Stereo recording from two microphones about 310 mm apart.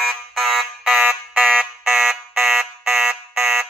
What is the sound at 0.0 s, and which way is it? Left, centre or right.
Alarm, centre.